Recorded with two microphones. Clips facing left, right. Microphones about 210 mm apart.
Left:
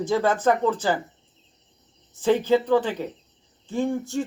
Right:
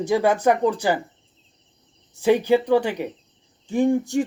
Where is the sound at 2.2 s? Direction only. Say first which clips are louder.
Right 2 dB; 15° right (ahead or behind).